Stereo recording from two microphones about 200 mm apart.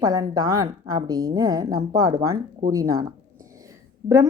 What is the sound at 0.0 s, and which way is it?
A woman's voice, 20° right (ahead or behind).